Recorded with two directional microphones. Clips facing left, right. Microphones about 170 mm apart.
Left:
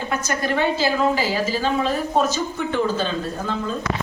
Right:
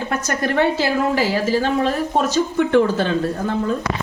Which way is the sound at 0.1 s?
65° right (ahead or behind).